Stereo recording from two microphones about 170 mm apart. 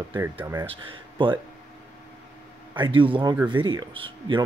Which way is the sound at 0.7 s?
30° right (ahead or behind).